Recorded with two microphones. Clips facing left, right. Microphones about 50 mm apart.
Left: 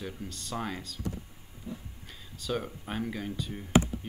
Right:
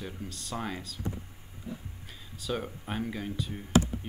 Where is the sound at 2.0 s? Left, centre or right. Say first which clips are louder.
Even; centre.